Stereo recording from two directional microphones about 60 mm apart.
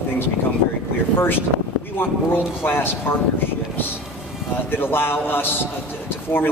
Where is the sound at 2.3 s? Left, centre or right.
Left.